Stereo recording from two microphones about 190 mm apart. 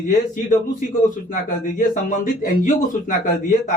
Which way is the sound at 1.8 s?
45° left (ahead or behind).